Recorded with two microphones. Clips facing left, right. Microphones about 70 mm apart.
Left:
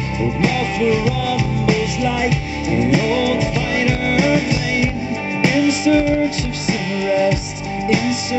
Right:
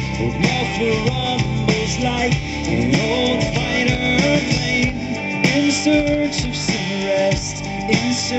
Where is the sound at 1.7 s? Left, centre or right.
Left.